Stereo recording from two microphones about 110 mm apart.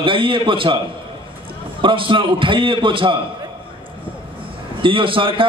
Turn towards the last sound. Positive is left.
turn(degrees=-50)  # may be behind; listen again after turning